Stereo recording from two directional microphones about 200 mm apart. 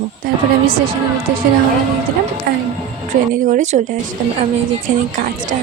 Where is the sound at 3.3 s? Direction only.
40° right (ahead or behind).